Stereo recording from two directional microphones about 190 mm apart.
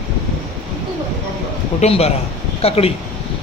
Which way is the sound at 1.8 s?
35° left (ahead or behind).